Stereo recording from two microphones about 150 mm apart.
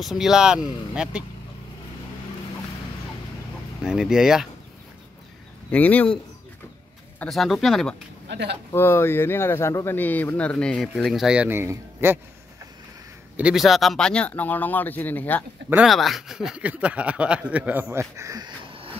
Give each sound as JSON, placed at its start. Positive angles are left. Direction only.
{"t": 0.0, "sound": "speech", "side_deg": 0}
{"t": 3.8, "sound": "speech", "side_deg": -5}
{"t": 5.7, "sound": "speech", "side_deg": 10}
{"t": 7.2, "sound": "speech", "side_deg": 0}
{"t": 8.7, "sound": "speech", "side_deg": 15}
{"t": 13.4, "sound": "speech", "side_deg": -5}
{"t": 15.7, "sound": "a man's voice", "side_deg": 0}
{"t": 18.7, "sound": "train", "side_deg": -35}